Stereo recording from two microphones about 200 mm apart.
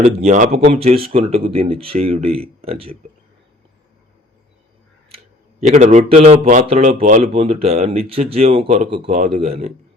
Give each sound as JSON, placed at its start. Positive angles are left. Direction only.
{"t": 0.0, "sound": "speech", "side_deg": -35}
{"t": 5.1, "sound": "speech", "side_deg": -35}